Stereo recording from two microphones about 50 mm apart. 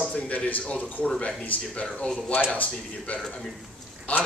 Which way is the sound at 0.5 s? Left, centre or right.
Left.